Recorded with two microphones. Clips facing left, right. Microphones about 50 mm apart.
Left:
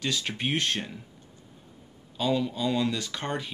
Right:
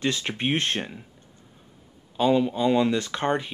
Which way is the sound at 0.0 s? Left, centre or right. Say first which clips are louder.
Right 4 dB; right.